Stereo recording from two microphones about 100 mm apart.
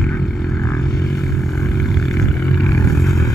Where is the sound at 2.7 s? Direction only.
35° left (ahead or behind).